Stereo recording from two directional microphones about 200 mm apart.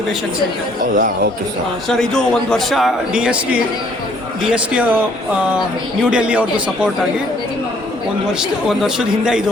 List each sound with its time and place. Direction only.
0.9 s speech: 45° right (ahead or behind)
1.9 s a man's voice: centre (ahead or behind)
4.5 s a man's voice: 5° right (ahead or behind)
6.0 s a man's voice: 5° right (ahead or behind)
8.3 s a man's voice: 5° right (ahead or behind)